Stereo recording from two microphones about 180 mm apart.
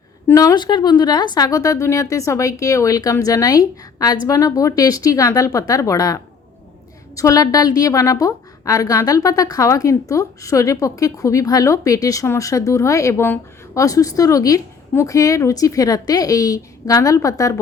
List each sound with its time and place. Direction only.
0.3 s a woman's voice: 20° left (ahead or behind)
7.2 s a woman's voice: 20° left (ahead or behind)